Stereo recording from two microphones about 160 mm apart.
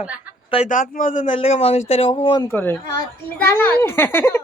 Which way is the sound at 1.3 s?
40° left (ahead or behind).